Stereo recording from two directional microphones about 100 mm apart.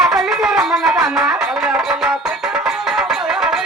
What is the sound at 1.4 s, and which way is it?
Music, 5° right (ahead or behind).